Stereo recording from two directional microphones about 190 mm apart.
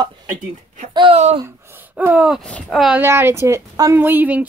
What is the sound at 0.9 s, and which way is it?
Speech, 30° right (ahead or behind).